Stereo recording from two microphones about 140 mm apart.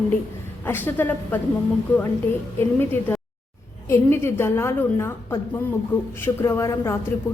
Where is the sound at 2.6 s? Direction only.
15° left (ahead or behind).